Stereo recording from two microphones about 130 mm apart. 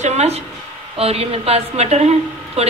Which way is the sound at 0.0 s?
55° right (ahead or behind).